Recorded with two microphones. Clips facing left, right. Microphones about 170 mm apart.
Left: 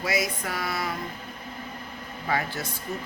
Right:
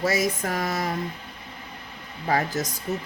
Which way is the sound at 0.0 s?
45° right (ahead or behind).